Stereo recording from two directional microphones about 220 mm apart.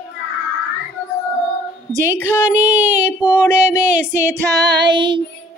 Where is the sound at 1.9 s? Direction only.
10° right (ahead or behind).